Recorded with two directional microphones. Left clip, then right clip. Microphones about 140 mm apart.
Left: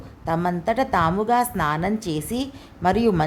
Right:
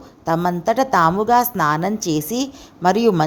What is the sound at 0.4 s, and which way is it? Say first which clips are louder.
Speech: right 4 dB; 30° right (ahead or behind).